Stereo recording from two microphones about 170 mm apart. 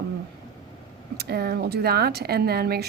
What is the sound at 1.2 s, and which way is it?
Speech, 70° right (ahead or behind).